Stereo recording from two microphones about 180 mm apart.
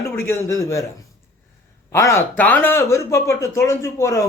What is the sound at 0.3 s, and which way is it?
Speech, 15° left (ahead or behind).